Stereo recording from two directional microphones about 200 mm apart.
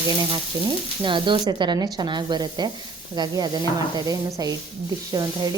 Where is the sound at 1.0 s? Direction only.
25° right (ahead or behind).